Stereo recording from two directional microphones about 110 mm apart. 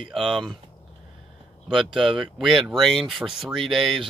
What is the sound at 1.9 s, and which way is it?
Speech, centre (ahead or behind).